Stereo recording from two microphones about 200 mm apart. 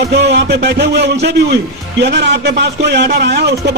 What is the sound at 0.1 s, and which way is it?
A man's voice, 60° right (ahead or behind).